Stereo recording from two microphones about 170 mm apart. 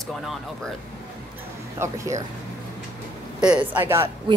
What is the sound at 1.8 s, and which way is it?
Speech, 20° right (ahead or behind).